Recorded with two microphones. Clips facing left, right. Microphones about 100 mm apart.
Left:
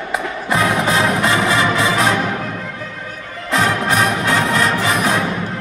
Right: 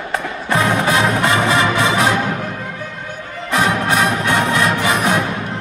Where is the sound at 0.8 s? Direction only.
25° right (ahead or behind).